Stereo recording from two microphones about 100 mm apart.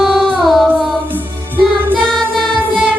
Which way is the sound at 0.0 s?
Centre (ahead or behind).